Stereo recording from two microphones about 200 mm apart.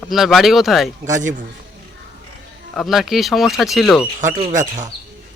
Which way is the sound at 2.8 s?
Centre (ahead or behind).